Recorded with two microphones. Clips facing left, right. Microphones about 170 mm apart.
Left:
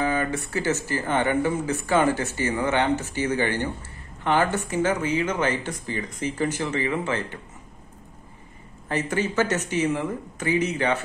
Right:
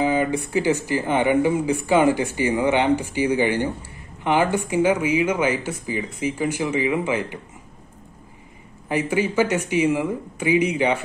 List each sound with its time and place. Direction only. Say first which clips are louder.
0.0 s speech: right 4 dB; 15° right (ahead or behind)
8.8 s speech: right 4 dB; 10° right (ahead or behind)